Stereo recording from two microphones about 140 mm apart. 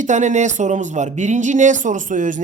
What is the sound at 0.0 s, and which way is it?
Speech, 60° right (ahead or behind).